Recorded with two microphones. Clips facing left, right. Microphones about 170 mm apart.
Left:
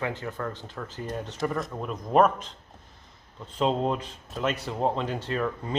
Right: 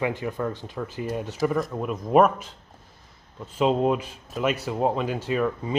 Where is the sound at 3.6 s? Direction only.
10° right (ahead or behind).